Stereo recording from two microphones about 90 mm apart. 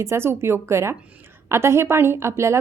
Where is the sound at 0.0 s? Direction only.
30° right (ahead or behind).